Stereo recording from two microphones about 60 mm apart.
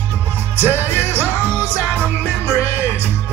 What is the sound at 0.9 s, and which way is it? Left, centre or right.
Music, right.